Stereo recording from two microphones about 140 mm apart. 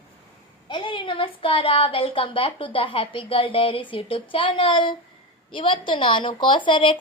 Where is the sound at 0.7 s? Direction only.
35° left (ahead or behind).